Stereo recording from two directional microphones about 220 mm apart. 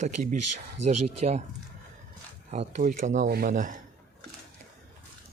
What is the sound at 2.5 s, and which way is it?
Speech, 35° right (ahead or behind).